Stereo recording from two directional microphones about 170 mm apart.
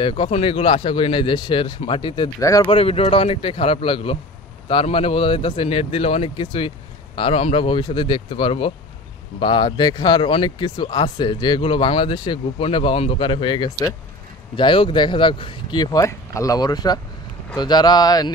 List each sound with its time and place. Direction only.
0.0 s speech: 30° left (ahead or behind)
2.7 s speech: 35° left (ahead or behind)